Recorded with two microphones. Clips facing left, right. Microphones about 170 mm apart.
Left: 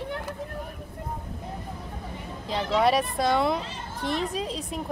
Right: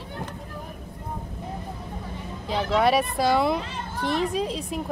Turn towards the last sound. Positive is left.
turn(degrees=0)  # may be behind; listen again after turning